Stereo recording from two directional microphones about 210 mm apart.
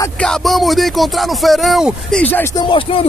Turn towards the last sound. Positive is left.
turn(degrees=25)  # may be behind; listen again after turning